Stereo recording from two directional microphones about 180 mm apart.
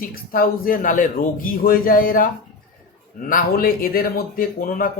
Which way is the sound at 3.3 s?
50° left (ahead or behind).